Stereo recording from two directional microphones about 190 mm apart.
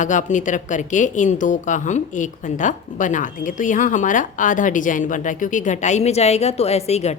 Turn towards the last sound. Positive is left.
turn(degrees=35)  # may be behind; listen again after turning